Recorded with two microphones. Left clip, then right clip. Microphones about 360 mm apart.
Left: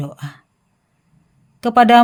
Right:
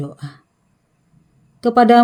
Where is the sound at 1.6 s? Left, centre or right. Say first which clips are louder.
Left 1 dB; left.